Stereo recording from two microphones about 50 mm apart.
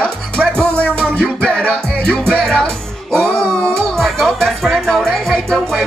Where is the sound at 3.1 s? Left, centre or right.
Centre.